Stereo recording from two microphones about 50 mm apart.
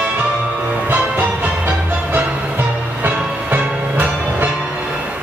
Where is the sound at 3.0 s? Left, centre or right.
Right.